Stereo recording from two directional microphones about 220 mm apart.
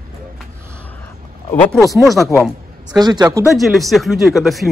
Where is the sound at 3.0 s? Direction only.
15° right (ahead or behind).